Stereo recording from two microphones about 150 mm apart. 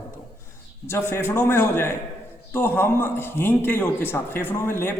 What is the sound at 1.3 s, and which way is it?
A man's voice, 15° left (ahead or behind).